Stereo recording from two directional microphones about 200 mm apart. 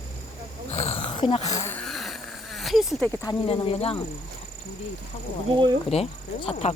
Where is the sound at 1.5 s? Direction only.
15° left (ahead or behind); by 3.1 s centre (ahead or behind).